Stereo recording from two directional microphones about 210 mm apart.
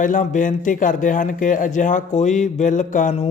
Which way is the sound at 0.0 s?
40° left (ahead or behind).